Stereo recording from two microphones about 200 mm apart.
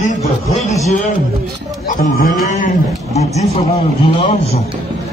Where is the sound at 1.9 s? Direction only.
40° left (ahead or behind).